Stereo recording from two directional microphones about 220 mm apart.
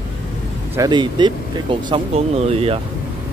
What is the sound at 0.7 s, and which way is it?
Speech, 20° right (ahead or behind).